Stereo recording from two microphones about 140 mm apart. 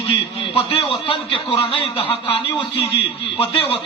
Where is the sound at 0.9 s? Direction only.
40° left (ahead or behind).